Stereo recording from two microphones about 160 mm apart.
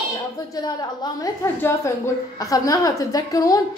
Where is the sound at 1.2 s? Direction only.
20° left (ahead or behind).